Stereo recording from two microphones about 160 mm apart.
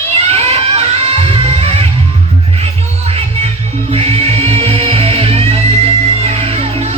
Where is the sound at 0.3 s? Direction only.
40° right (ahead or behind).